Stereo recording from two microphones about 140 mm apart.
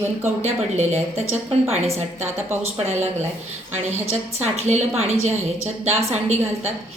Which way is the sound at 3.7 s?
50° right (ahead or behind).